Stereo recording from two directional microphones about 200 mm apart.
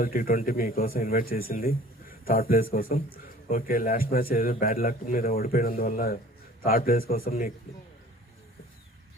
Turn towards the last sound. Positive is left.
turn(degrees=45)  # may be behind; listen again after turning